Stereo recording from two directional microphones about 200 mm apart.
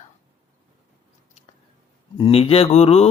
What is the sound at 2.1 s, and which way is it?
Speech, 25° left (ahead or behind).